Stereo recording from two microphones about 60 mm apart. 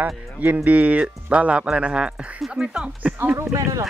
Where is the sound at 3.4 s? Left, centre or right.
Right.